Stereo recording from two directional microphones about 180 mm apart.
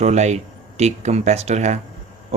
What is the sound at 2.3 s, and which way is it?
Owl, 35° right (ahead or behind).